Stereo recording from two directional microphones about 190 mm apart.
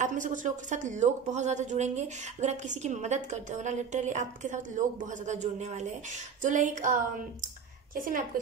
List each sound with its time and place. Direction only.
0.0 s a woman's voice: 40° right (ahead or behind)